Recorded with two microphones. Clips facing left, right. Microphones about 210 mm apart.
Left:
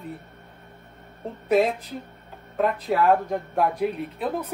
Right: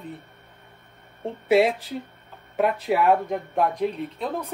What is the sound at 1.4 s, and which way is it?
Speech, 90° right.